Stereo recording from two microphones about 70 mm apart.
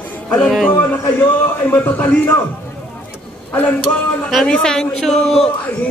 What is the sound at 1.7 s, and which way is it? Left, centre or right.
Speech, left.